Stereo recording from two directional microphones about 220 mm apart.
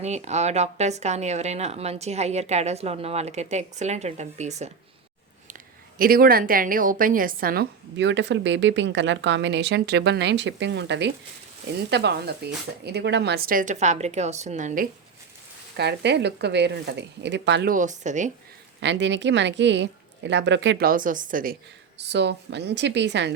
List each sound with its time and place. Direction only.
0.0 s speech: 30° right (ahead or behind)
15.7 s speech: 50° right (ahead or behind)
17.7 s speech: 35° right (ahead or behind)
18.8 s speech: 55° right (ahead or behind)